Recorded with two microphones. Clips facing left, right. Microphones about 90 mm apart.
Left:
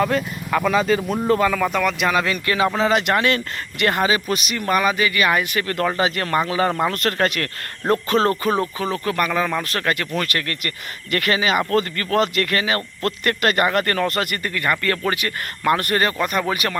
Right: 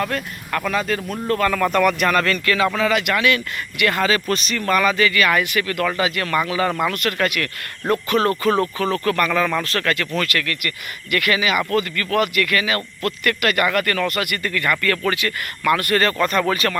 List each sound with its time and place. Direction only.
0.0 s speech: 5° left (ahead or behind)
2.5 s speech: 25° left (ahead or behind)
8.4 s speech: 20° left (ahead or behind)